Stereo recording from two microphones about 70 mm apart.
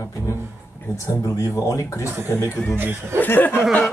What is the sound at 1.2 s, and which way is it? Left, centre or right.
Speech, left.